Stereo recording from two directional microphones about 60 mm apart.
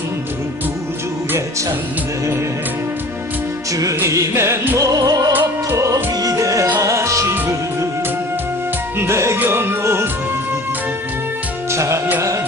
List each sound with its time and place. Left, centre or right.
4.0 s music: right
4.3 s music: right
4.8 s music: right
5.3 s music: right
6.2 s music: right
9.0 s music: right
9.4 s music: right
11.7 s music: right